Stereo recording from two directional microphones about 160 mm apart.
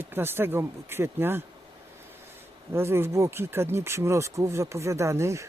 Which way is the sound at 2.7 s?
15° right (ahead or behind).